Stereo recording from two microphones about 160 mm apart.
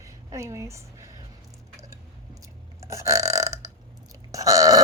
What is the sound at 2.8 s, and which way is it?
Burping, 20° right (ahead or behind).